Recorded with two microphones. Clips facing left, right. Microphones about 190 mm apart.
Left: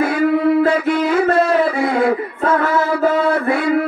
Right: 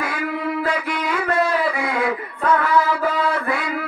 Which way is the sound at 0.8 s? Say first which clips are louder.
Left 8 dB; 35° left (ahead or behind).